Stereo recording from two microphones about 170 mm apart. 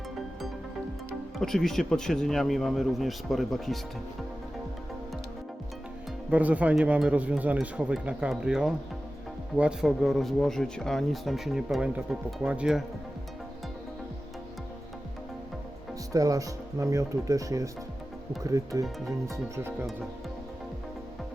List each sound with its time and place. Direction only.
1.4 s speech: centre (ahead or behind)
6.3 s speech: 10° right (ahead or behind)
16.1 s speech: 20° right (ahead or behind)